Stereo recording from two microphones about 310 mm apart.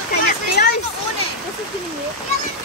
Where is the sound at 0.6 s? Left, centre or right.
Left.